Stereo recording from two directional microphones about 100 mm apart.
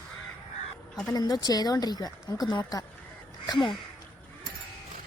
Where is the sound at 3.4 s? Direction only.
50° left (ahead or behind).